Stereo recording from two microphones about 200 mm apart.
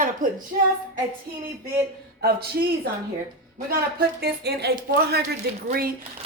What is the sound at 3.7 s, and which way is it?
A woman's voice, 50° right (ahead or behind).